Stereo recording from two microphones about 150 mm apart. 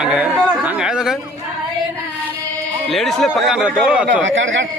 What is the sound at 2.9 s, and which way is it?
Speech, centre (ahead or behind).